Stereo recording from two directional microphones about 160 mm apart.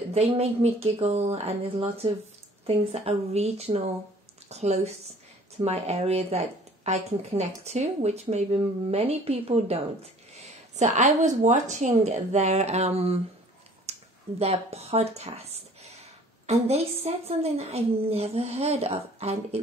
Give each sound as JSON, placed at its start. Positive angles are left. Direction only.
{"t": 0.4, "sound": "speech", "side_deg": -40}
{"t": 13.9, "sound": "a sound", "side_deg": -40}
{"t": 14.4, "sound": "speech", "side_deg": -40}